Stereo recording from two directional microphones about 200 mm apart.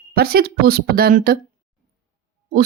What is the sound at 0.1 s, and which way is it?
Speech, 50° right (ahead or behind).